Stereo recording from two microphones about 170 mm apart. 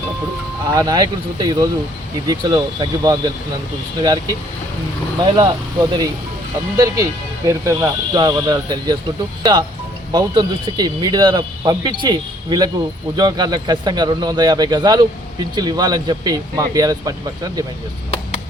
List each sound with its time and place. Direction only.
0.7 s speech: 25° right (ahead or behind)